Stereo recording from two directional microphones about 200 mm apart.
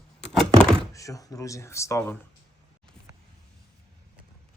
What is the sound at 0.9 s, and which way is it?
Speech, 15° left (ahead or behind).